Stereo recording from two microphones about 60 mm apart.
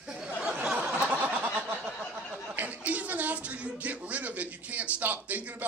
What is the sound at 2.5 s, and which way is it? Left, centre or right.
Speech, right.